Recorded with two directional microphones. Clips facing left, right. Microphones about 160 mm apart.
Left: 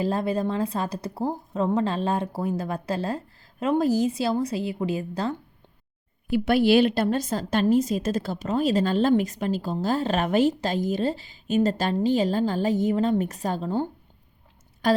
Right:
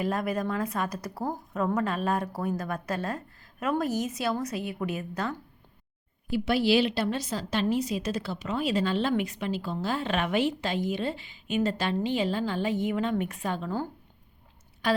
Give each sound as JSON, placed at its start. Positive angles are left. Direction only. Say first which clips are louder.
{"t": 0.0, "sound": "speech", "louder": "left 4 dB", "side_deg": 30}
{"t": 6.3, "sound": "a woman's voice", "louder": "left 5 dB", "side_deg": 55}
{"t": 14.8, "sound": "speech", "louder": "left 5 dB", "side_deg": 45}